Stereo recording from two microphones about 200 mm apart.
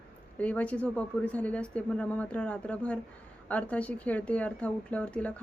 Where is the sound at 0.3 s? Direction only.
5° left (ahead or behind).